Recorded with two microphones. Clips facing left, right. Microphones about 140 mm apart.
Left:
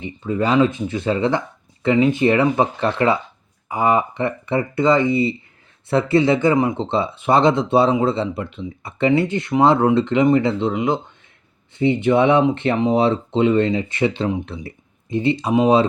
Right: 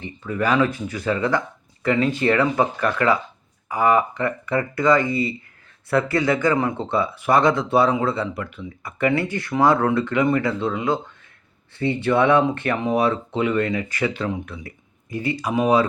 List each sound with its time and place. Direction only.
0.0 s speech: 25° left (ahead or behind)